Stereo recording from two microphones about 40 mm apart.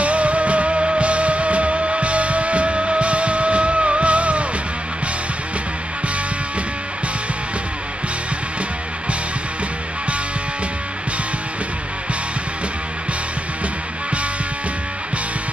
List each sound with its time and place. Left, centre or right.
0.0 s music: right